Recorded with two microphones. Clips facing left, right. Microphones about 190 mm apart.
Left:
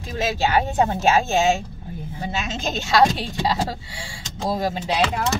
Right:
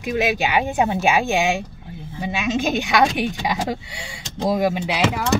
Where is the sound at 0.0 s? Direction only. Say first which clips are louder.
Right 3 dB; 15° right (ahead or behind).